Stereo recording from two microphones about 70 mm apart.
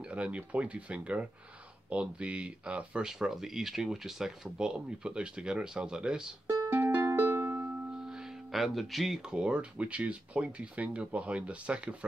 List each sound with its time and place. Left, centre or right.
0.1 s speech: centre
6.8 s music: right
8.0 s speech: centre